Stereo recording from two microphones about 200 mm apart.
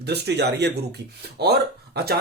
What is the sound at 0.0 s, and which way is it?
Speech, 55° right (ahead or behind).